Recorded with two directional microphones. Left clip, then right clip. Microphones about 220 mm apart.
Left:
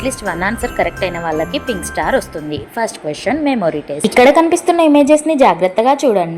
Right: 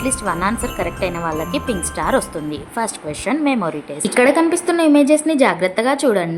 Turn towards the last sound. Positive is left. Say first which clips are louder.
# left 5 dB
turn(degrees=-25)  # may be behind; listen again after turning